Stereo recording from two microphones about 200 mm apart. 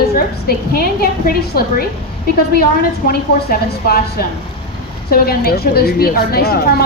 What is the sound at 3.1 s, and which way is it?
A woman's voice, 50° left (ahead or behind).